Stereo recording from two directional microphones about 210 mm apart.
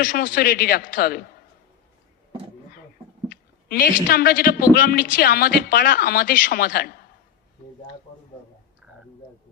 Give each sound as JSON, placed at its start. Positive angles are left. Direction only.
{"t": 0.0, "sound": "speech", "side_deg": 40}
{"t": 3.2, "sound": "a sound", "side_deg": 45}
{"t": 4.1, "sound": "speech", "side_deg": 45}